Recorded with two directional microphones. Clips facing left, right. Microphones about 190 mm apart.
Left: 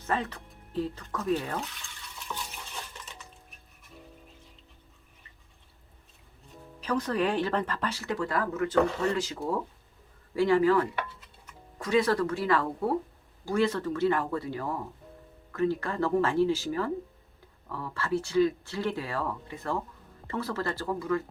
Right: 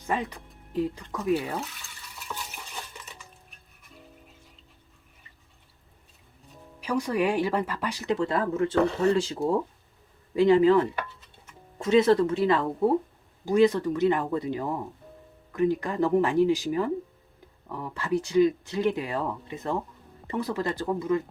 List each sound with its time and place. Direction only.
0.0 s speech: 15° right (ahead or behind)
2.2 s stir: 10° right (ahead or behind)
6.7 s speech: 10° right (ahead or behind)